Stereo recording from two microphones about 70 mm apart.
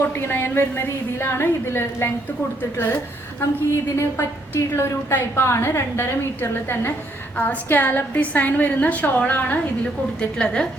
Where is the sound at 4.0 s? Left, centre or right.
Left; by 10.6 s centre.